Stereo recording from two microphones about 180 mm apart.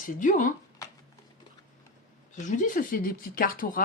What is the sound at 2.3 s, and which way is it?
Speech, 45° left (ahead or behind).